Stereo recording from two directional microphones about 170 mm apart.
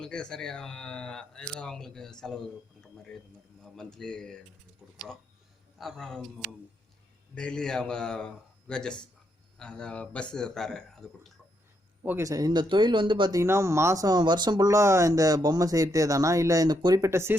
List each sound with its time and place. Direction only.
0.0 s speech: 5° left (ahead or behind)
5.8 s speech: centre (ahead or behind)
7.3 s speech: 5° left (ahead or behind)
12.0 s speech: 15° right (ahead or behind)